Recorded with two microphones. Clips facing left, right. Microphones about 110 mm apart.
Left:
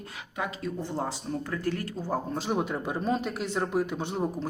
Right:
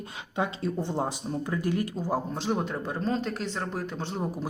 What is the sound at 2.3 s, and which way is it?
Speech, 5° left (ahead or behind).